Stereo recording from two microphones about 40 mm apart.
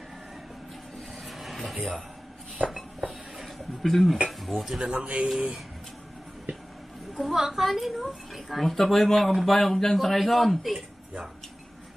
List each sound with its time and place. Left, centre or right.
1.2 s a sound: centre
2.7 s dishes: centre
4.3 s speech: centre
4.9 s speech: right
7.2 s speech: centre